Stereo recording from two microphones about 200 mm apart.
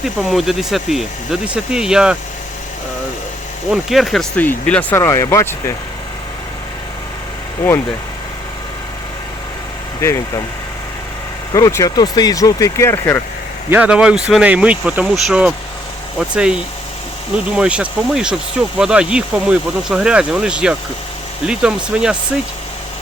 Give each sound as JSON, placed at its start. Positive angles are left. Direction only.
{"t": 0.0, "sound": "speech", "side_deg": 0}
{"t": 3.7, "sound": "speech", "side_deg": 0}
{"t": 10.0, "sound": "speech", "side_deg": 15}
{"t": 11.5, "sound": "speech", "side_deg": 15}
{"t": 13.7, "sound": "speech", "side_deg": -10}